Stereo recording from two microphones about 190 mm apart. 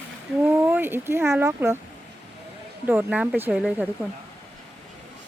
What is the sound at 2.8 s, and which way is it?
Speech, 10° right (ahead or behind).